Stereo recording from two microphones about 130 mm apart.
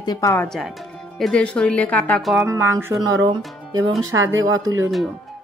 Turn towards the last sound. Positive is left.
turn(degrees=-20)  # may be behind; listen again after turning